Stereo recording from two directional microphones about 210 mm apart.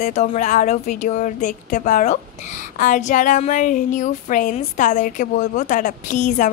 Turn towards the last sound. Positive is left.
turn(degrees=35)  # may be behind; listen again after turning